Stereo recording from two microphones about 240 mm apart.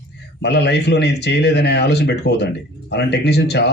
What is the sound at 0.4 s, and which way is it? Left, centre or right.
Speech, left.